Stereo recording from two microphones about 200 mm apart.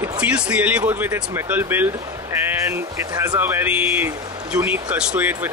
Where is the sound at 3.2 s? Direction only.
10° right (ahead or behind).